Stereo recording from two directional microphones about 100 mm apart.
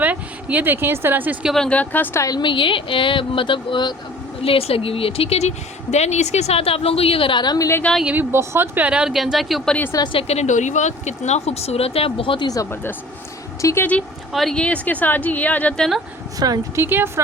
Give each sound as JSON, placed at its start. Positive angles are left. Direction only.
{"t": 0.0, "sound": "speech", "side_deg": -15}
{"t": 1.5, "sound": "a woman's voice", "side_deg": 10}
{"t": 2.2, "sound": "speech", "side_deg": 45}
{"t": 4.4, "sound": "a woman's voice", "side_deg": 70}
{"t": 8.0, "sound": "speech", "side_deg": -20}
{"t": 8.9, "sound": "speech", "side_deg": -5}
{"t": 10.1, "sound": "speech", "side_deg": 80}
{"t": 11.3, "sound": "speech", "side_deg": 90}
{"t": 13.6, "sound": "speech", "side_deg": 30}
{"t": 14.3, "sound": "a woman's voice", "side_deg": 5}
{"t": 16.4, "sound": "a woman's voice", "side_deg": -40}
{"t": 16.7, "sound": "speech", "side_deg": -25}